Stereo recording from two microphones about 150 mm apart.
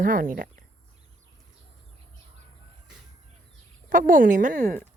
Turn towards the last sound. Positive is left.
turn(degrees=-60)  # may be behind; listen again after turning